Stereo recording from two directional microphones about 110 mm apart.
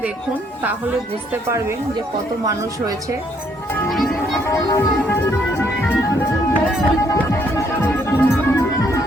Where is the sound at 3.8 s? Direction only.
Centre (ahead or behind).